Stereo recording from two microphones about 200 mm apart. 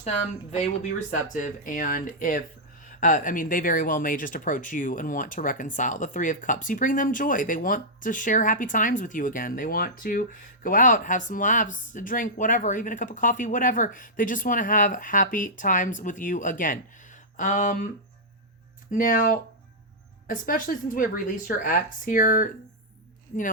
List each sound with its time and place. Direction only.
0.0 s speech: 35° left (ahead or behind)
18.9 s speech: 40° left (ahead or behind)